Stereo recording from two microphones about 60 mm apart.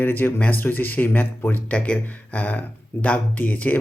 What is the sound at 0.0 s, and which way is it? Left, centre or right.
Speech, left.